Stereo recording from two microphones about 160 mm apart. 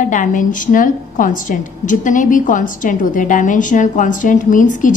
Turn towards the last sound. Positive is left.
turn(degrees=55)  # may be behind; listen again after turning